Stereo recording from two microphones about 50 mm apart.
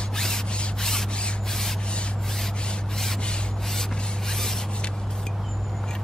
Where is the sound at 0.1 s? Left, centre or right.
Centre.